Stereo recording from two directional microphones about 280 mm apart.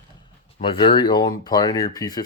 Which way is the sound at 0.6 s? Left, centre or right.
Centre.